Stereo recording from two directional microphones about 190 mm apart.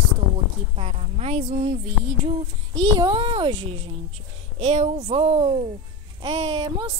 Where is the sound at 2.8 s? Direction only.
25° right (ahead or behind).